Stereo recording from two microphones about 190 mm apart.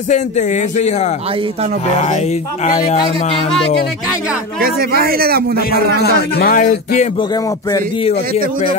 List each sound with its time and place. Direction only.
0.1 s speech: 40° left (ahead or behind)
4.6 s a man's voice: 50° right (ahead or behind)
5.7 s speech: 55° left (ahead or behind); by 8.5 s 35° left (ahead or behind)